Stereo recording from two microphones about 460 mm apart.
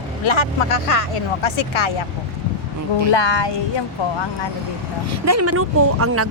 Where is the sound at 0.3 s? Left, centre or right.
Left.